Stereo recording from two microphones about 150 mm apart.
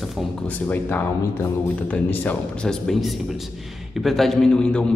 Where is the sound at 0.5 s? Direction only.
10° left (ahead or behind).